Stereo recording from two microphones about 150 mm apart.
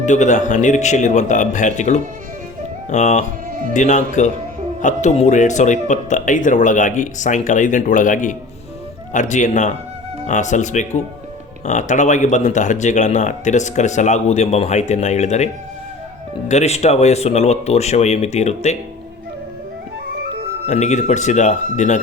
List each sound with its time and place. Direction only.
0.0 s speech: 55° left (ahead or behind)
16.5 s speech: 45° left (ahead or behind)
20.7 s speech: 50° left (ahead or behind)